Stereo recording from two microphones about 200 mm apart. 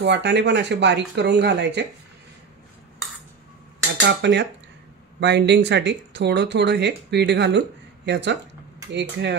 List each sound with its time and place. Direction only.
0.0 s speech: 60° right (ahead or behind)
4.0 s speech: 60° right (ahead or behind)